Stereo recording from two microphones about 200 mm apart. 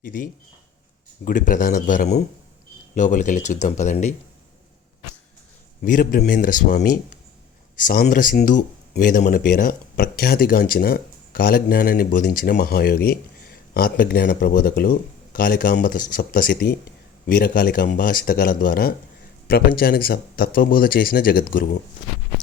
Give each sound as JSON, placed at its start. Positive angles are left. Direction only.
{"t": 0.0, "sound": "speech", "side_deg": 40}
{"t": 5.8, "sound": "speech", "side_deg": 45}